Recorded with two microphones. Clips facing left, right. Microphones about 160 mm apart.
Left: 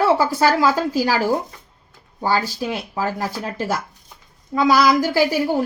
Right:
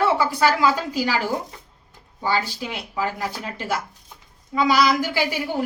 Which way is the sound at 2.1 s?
40° left (ahead or behind).